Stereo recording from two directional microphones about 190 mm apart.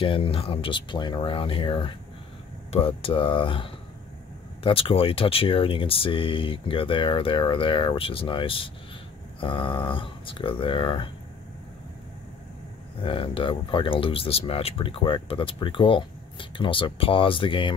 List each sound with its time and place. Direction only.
0.0 s speech: 30° left (ahead or behind)
13.0 s speech: 30° left (ahead or behind)